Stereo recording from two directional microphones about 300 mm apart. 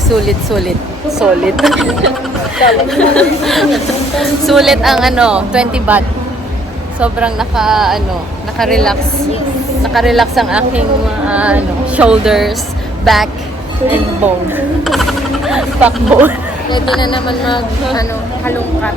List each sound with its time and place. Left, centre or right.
0.1 s speech: centre
7.0 s speech: centre
14.5 s speech: centre
16.6 s speech: centre